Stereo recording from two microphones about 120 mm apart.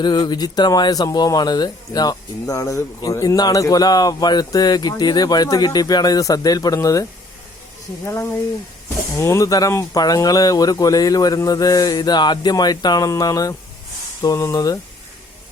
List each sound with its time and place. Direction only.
0.0 s speech: 35° left (ahead or behind)